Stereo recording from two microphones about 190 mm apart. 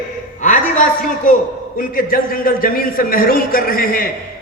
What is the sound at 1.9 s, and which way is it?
A man's voice, 50° left (ahead or behind).